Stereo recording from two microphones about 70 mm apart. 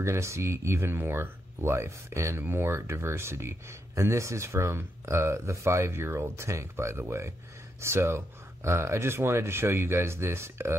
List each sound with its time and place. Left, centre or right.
0.0 s speech: right